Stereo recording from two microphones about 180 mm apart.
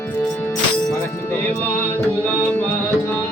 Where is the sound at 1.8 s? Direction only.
10° left (ahead or behind).